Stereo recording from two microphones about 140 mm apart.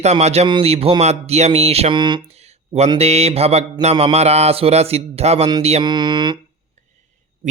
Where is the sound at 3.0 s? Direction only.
50° right (ahead or behind).